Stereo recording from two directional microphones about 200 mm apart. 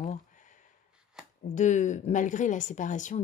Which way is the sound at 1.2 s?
Centre (ahead or behind).